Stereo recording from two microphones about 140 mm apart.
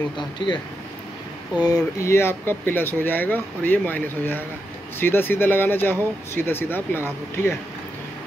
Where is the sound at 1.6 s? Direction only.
25° left (ahead or behind).